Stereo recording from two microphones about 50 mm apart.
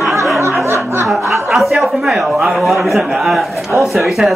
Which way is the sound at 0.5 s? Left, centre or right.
Right.